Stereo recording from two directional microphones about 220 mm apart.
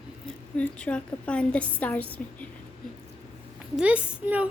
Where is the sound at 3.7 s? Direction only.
5° right (ahead or behind).